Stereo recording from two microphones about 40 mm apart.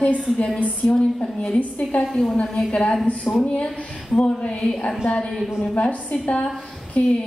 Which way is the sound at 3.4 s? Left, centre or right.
Left.